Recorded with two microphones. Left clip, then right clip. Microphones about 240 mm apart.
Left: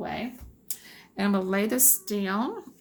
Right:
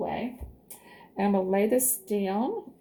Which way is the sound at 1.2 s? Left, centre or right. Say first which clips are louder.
Right 2 dB; left.